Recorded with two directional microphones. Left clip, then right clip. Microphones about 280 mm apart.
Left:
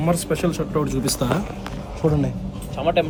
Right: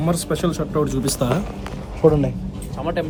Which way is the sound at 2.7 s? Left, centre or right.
Centre.